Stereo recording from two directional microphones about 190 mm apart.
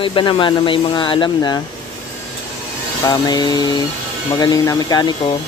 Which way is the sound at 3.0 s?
20° left (ahead or behind).